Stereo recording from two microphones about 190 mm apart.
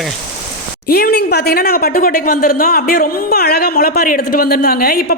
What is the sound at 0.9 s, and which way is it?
A woman's voice, 55° left (ahead or behind).